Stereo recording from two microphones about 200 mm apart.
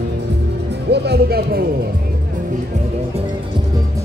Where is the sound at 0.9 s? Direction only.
55° right (ahead or behind).